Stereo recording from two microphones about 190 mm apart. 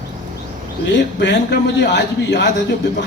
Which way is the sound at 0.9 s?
65° left (ahead or behind).